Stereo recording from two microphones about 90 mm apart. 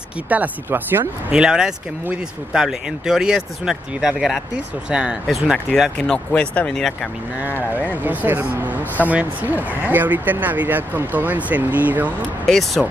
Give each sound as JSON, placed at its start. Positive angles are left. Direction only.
{"t": 0.3, "sound": "speech", "side_deg": -20}
{"t": 1.3, "sound": "speech", "side_deg": -10}
{"t": 5.9, "sound": "speech", "side_deg": 15}
{"t": 8.0, "sound": "speech", "side_deg": -20}
{"t": 12.4, "sound": "speech", "side_deg": 5}